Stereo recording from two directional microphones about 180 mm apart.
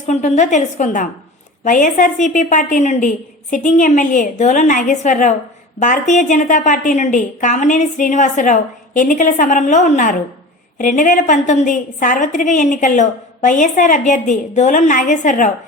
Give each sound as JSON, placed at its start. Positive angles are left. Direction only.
{"t": 0.1, "sound": "a woman's voice", "side_deg": 40}